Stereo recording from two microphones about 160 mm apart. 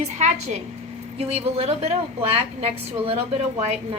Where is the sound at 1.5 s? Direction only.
40° right (ahead or behind).